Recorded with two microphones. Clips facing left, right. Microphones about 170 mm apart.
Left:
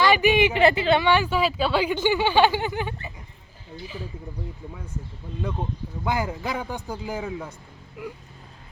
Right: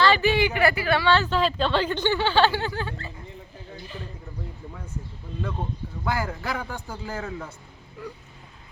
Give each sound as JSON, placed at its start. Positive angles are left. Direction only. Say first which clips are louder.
{"t": 0.0, "sound": "speech", "louder": "left 2 dB", "side_deg": 15}
{"t": 6.1, "sound": "speech", "louder": "left 2 dB", "side_deg": 20}